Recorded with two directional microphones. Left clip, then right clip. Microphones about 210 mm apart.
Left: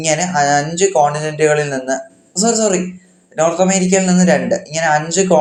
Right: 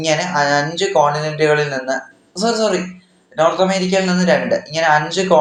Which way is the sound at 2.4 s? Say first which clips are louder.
Left 1 dB; 50° left (ahead or behind).